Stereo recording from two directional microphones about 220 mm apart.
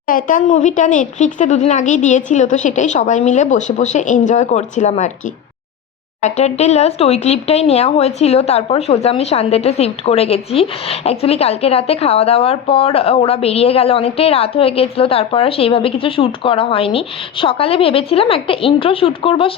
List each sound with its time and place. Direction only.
0.1 s speech: 40° left (ahead or behind)
6.2 s speech: 30° left (ahead or behind)